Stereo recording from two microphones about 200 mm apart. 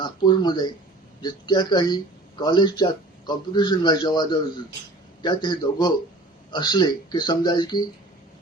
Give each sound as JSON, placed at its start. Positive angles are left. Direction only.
{"t": 0.0, "sound": "a man's voice", "side_deg": 20}